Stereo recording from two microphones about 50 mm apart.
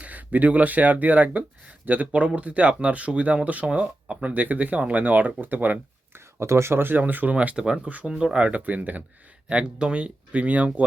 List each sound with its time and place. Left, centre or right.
0.0 s speech: right
6.1 s speech: right
7.5 s speech: centre; by 9.0 s right
9.5 s speech: right